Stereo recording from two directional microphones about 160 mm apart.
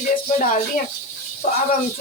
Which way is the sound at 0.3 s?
55° left (ahead or behind).